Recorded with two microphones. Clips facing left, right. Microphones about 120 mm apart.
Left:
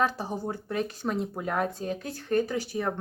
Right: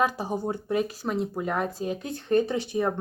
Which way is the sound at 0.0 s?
15° right (ahead or behind).